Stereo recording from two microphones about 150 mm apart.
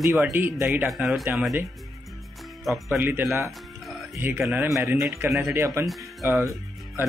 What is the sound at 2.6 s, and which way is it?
Speech, centre (ahead or behind).